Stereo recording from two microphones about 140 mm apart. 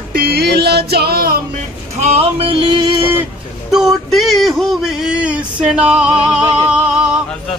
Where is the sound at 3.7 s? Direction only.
Centre (ahead or behind).